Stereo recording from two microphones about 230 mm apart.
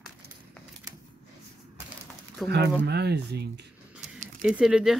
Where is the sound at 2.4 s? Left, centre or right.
Centre.